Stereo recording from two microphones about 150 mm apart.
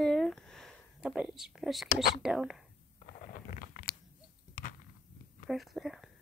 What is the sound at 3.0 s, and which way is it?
Crunch, 65° left (ahead or behind).